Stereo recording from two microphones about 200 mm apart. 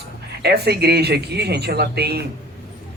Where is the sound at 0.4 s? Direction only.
55° right (ahead or behind).